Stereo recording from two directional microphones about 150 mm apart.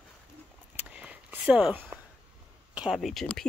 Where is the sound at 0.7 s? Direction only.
10° right (ahead or behind).